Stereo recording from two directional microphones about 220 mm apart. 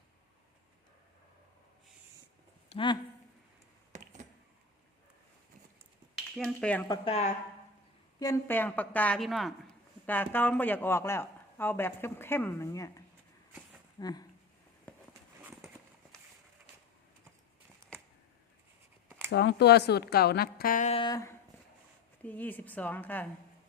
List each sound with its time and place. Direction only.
2.6 s speech: 20° left (ahead or behind)
3.9 s a sound: 30° right (ahead or behind)
6.3 s speech: 5° left (ahead or behind)
6.8 s speech: 20° left (ahead or behind)
8.2 s speech: 10° left (ahead or behind)
14.0 s speech: 20° left (ahead or behind)
19.3 s speech: 50° left (ahead or behind); by 23.2 s 10° left (ahead or behind)